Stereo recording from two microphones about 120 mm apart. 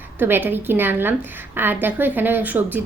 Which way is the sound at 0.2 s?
15° right (ahead or behind).